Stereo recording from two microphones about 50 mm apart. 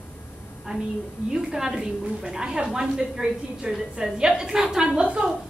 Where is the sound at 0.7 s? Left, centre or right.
Centre.